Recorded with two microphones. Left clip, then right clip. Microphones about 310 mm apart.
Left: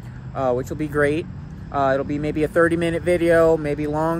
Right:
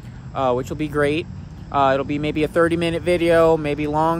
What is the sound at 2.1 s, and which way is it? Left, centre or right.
Speech, centre.